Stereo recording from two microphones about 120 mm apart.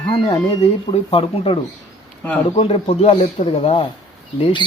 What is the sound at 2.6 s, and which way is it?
Speech, 60° left (ahead or behind).